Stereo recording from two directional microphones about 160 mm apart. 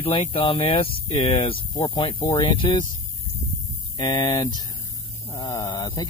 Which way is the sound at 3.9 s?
30° left (ahead or behind).